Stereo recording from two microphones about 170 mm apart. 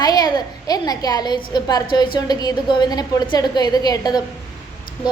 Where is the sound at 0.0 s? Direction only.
25° left (ahead or behind).